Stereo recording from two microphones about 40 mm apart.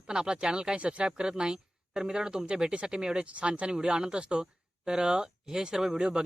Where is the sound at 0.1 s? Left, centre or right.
Right.